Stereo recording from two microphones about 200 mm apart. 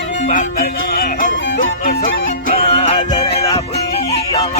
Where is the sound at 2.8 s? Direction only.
25° left (ahead or behind).